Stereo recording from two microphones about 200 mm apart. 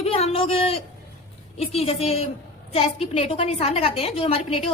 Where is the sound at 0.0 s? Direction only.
30° left (ahead or behind).